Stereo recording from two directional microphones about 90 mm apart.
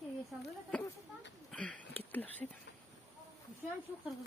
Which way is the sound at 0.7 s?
10° left (ahead or behind).